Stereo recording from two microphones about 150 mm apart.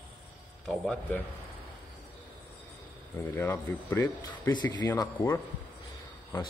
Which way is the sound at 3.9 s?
25° left (ahead or behind).